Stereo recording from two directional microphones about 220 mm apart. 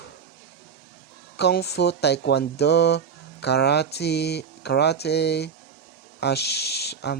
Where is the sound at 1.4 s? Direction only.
50° left (ahead or behind).